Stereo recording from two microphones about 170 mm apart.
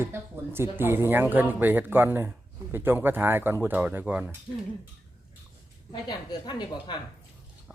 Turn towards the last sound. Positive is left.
turn(degrees=25)  # may be behind; listen again after turning